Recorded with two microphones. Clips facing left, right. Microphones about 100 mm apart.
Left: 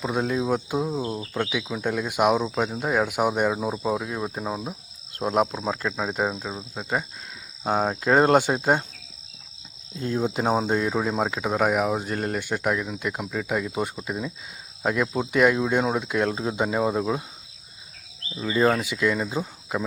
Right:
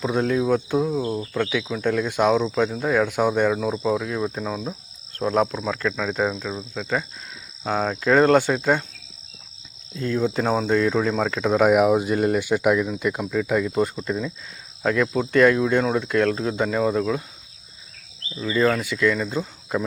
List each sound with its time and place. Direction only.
0.0 s speech: 5° left (ahead or behind)
5.6 s speech: 25° left (ahead or behind)
10.0 s speech: 20° left (ahead or behind)
18.3 s speech: 20° left (ahead or behind)
19.7 s speech: 5° left (ahead or behind)